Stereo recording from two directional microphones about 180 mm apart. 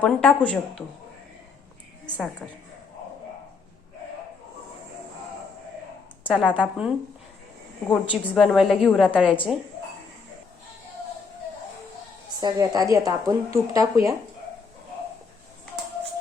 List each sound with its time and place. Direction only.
0.0 s a woman's voice: 5° left (ahead or behind)
2.0 s a woman's voice: 5° left (ahead or behind)
6.2 s a woman's voice: 5° right (ahead or behind)
12.4 s a woman's voice: 20° right (ahead or behind)